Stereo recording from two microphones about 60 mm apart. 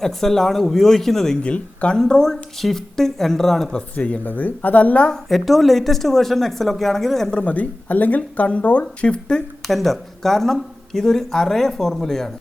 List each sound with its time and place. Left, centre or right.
0.0 s speech: centre
1.5 s speech: centre
3.9 s speech: left
5.3 s speech: centre
7.3 s speech: left
9.6 s speech: centre